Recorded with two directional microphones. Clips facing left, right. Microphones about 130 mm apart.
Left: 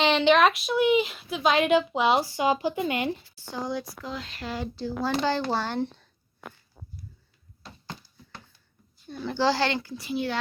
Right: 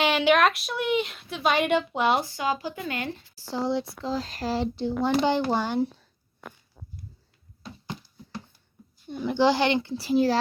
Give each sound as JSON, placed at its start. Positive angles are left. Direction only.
{"t": 0.0, "sound": "speech", "side_deg": -5}
{"t": 2.3, "sound": "speech", "side_deg": 15}
{"t": 3.3, "sound": "a child's voice", "side_deg": -30}
{"t": 4.7, "sound": "a child's voice", "side_deg": -25}
{"t": 9.0, "sound": "a child's voice", "side_deg": -15}